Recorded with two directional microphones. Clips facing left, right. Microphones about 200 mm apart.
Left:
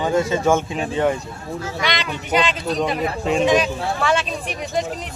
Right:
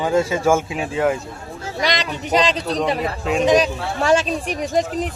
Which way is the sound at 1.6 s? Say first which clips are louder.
Right 3 dB; 40° right (ahead or behind).